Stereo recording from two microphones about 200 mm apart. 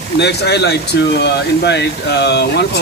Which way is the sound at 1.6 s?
55° left (ahead or behind).